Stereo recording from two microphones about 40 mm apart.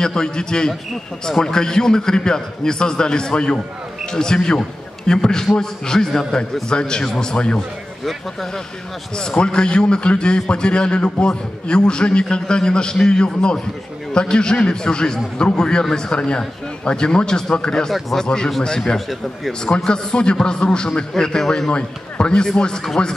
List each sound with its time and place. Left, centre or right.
0.0 s a man's voice: centre
8.0 s speech: centre
9.1 s a man's voice: left
18.9 s speech: centre
19.8 s a man's voice: left